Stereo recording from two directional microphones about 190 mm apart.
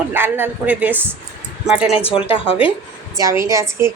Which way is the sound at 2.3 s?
30° left (ahead or behind).